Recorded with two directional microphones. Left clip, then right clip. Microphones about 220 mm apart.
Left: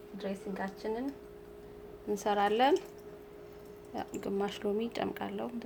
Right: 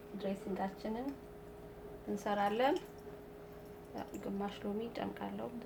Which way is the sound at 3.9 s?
50° left (ahead or behind).